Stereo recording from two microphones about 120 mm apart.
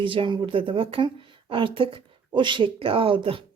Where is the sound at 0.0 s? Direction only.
45° right (ahead or behind).